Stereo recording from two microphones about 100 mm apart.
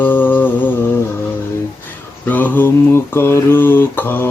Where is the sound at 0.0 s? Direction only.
20° left (ahead or behind).